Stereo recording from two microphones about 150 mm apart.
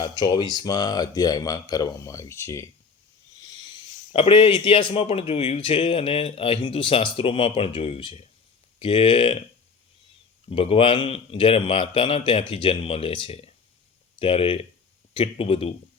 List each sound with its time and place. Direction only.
0.0 s speech: 30° left (ahead or behind)
4.1 s speech: 40° left (ahead or behind)
10.5 s speech: 40° left (ahead or behind)